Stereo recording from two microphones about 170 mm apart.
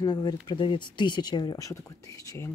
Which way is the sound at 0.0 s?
25° left (ahead or behind).